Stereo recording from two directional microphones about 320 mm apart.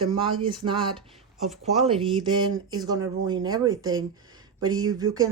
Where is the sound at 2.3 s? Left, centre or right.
Centre.